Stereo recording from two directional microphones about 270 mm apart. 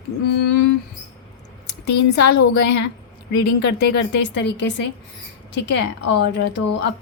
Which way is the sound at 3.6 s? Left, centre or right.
Left.